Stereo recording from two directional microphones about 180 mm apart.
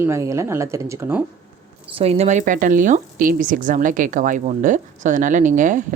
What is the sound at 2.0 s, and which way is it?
Speech, 35° right (ahead or behind).